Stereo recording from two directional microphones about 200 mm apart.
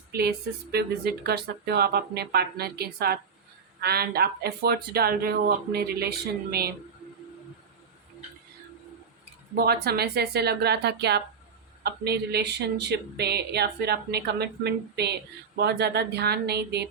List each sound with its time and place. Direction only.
0.1 s speech: 55° right (ahead or behind)
9.6 s speech: 50° right (ahead or behind)